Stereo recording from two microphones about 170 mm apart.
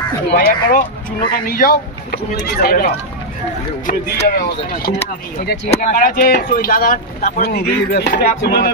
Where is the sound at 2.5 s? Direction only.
60° left (ahead or behind).